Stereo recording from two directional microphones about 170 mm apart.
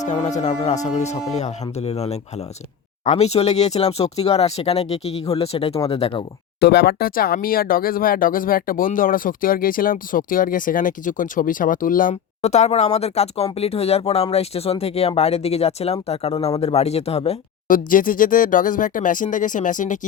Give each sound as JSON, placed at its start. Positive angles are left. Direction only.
{"t": 0.0, "sound": "speech", "side_deg": 45}
{"t": 6.6, "sound": "speech", "side_deg": 70}
{"t": 17.7, "sound": "speech", "side_deg": 55}